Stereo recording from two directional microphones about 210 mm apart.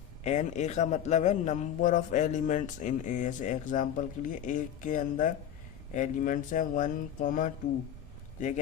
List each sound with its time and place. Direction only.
0.3 s a man's voice: 35° left (ahead or behind)